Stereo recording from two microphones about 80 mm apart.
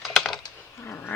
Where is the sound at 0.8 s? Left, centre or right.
Left.